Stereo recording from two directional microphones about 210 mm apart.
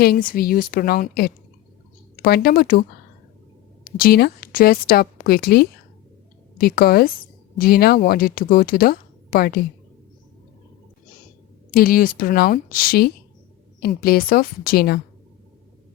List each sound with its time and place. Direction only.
0.0 s speech: 45° left (ahead or behind)
3.9 s speech: 45° left (ahead or behind)
11.7 s speech: 40° left (ahead or behind)